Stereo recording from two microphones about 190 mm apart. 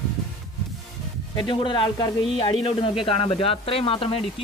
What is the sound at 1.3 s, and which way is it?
Speech, 25° left (ahead or behind).